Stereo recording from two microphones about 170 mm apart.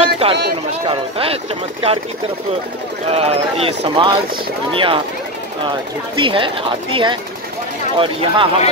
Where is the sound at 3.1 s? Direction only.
35° right (ahead or behind).